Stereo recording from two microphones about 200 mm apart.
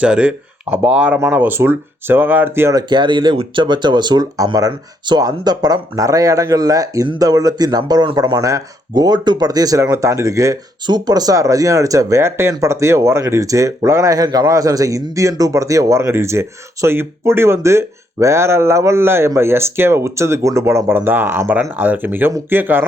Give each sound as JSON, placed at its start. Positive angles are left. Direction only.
{"t": 0.0, "sound": "speech", "side_deg": -5}